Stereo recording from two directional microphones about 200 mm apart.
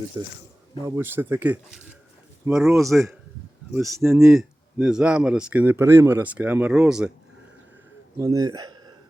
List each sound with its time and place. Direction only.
0.1 s speech: 20° right (ahead or behind); by 2.7 s centre (ahead or behind)
3.8 s speech: 15° right (ahead or behind)
4.2 s speech: centre (ahead or behind)
8.2 s speech: 15° right (ahead or behind)